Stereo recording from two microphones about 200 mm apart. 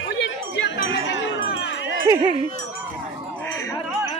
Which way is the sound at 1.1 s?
65° left (ahead or behind).